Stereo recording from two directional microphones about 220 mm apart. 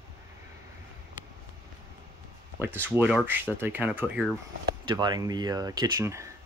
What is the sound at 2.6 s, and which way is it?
Speech, 10° right (ahead or behind).